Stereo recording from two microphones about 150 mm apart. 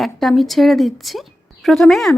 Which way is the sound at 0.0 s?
Centre (ahead or behind).